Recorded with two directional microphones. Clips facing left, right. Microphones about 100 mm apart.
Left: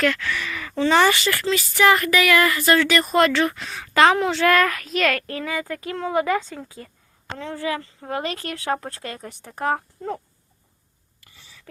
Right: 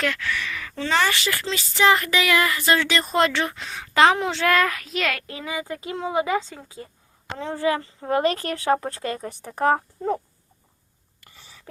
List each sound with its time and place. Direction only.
0.2 s speech: 5° left (ahead or behind)
1.3 s a woman's voice: 20° right (ahead or behind)
11.3 s whispering: 40° right (ahead or behind)